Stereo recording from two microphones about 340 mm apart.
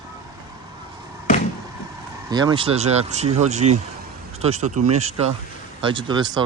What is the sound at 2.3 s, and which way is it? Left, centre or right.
Speech, centre.